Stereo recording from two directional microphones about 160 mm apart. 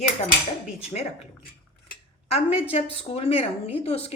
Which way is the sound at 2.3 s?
40° left (ahead or behind).